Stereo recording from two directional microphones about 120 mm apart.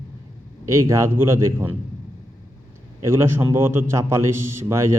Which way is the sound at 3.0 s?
20° right (ahead or behind).